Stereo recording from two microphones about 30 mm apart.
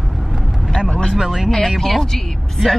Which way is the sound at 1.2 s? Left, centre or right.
Centre.